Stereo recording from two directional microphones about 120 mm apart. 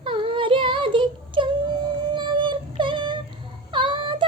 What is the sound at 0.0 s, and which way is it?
Child singing, 45° right (ahead or behind).